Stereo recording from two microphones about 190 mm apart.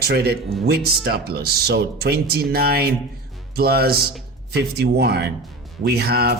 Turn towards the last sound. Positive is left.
turn(degrees=-55)  # may be behind; listen again after turning